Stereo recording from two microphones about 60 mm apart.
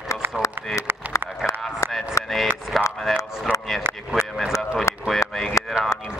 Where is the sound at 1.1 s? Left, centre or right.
Left.